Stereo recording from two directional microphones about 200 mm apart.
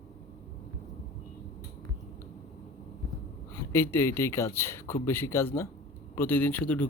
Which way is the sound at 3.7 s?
10° left (ahead or behind).